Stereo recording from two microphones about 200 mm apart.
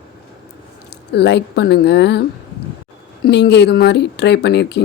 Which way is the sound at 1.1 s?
60° left (ahead or behind).